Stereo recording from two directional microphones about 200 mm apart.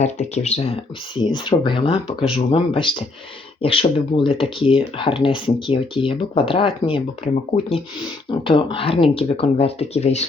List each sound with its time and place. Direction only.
0.0 s speech: 35° left (ahead or behind)
8.3 s speech: 25° left (ahead or behind)